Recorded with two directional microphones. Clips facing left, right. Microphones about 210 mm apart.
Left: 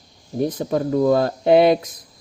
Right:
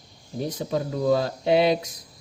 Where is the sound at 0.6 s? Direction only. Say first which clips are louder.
Left 7 dB; 55° left (ahead or behind).